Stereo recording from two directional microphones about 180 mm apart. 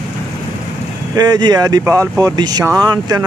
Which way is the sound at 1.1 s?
20° right (ahead or behind).